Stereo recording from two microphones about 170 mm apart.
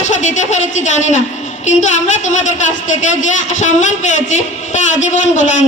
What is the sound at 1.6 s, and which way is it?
A woman's voice, 45° left (ahead or behind).